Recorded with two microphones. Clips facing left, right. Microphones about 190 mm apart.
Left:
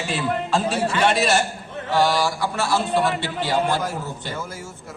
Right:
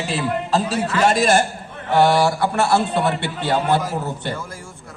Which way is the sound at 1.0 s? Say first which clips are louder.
Right 4 dB; 45° right (ahead or behind).